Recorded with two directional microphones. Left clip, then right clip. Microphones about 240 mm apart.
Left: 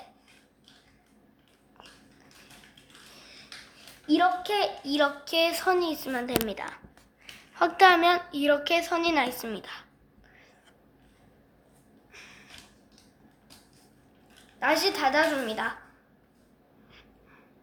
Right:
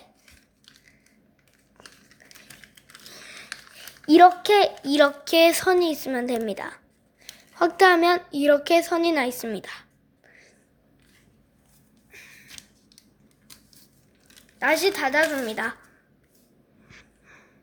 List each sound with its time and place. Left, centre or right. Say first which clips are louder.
4.0 s a woman's voice: right 10 dB; right
14.6 s a woman's voice: right 3 dB; right